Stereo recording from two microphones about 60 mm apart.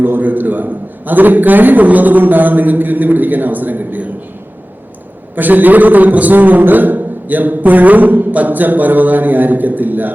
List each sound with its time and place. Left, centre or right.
0.0 s a man's voice: right
5.3 s a man's voice: right